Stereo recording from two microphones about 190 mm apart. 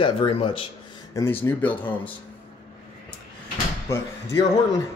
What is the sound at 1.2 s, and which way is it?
Speech, 15° left (ahead or behind).